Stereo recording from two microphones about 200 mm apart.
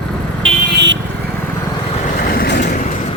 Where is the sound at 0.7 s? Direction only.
65° right (ahead or behind).